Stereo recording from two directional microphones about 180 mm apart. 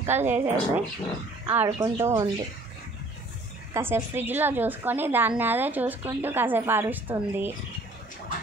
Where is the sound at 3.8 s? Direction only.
10° right (ahead or behind).